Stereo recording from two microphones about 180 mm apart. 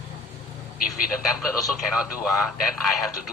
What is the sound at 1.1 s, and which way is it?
Speech, 5° right (ahead or behind).